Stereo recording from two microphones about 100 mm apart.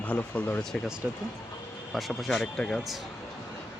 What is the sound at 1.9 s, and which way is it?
Speech, centre (ahead or behind).